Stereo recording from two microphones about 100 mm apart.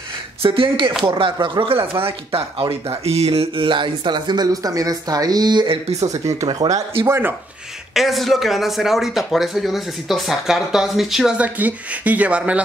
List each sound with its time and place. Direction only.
0.4 s speech: 60° right (ahead or behind)
2.0 s speech: 70° right (ahead or behind); by 5.7 s 45° right (ahead or behind)
5.9 s speech: 35° right (ahead or behind)
6.4 s speech: 50° right (ahead or behind)
7.1 s speech: 20° right (ahead or behind)
7.9 s speech: centre (ahead or behind)
11.3 s speech: 15° right (ahead or behind)